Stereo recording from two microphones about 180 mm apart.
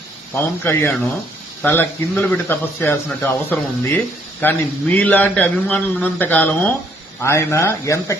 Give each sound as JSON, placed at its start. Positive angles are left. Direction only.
{"t": 0.3, "sound": "a man's voice", "side_deg": 10}